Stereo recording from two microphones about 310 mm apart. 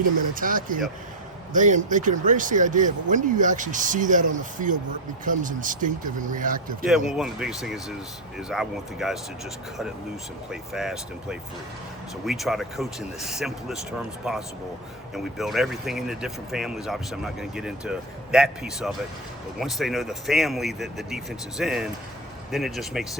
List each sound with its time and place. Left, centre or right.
0.3 s speech: right
7.1 s speech: centre
10.5 s speech: centre